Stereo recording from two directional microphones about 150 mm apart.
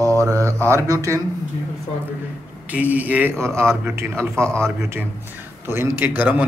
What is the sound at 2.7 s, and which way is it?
Speech, 10° right (ahead or behind).